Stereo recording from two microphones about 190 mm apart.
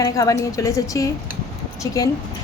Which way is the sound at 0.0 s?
15° left (ahead or behind).